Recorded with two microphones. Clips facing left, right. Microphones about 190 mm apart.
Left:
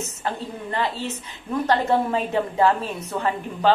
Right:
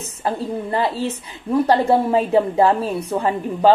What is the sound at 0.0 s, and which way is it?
A woman's voice, 35° right (ahead or behind).